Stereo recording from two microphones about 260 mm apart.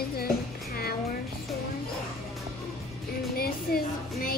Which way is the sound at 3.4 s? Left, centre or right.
Left.